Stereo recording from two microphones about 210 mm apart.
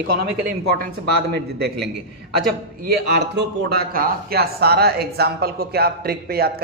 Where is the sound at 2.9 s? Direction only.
55° right (ahead or behind).